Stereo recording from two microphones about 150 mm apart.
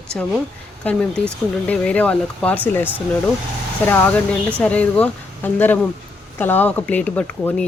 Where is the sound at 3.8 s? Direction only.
15° left (ahead or behind).